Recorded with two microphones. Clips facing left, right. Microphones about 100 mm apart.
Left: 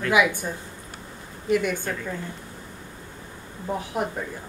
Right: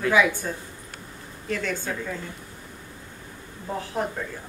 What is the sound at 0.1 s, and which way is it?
Speech, 15° left (ahead or behind).